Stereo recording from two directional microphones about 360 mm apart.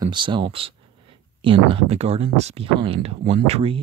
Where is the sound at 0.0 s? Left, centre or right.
Centre.